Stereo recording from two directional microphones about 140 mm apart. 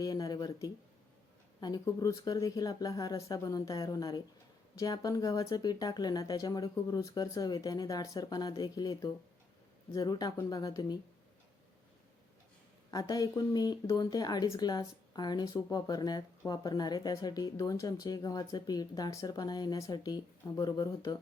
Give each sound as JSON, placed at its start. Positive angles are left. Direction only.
{"t": 0.0, "sound": "a sound", "side_deg": 25}
{"t": 1.6, "sound": "speech", "side_deg": 25}
{"t": 12.9, "sound": "speech", "side_deg": 25}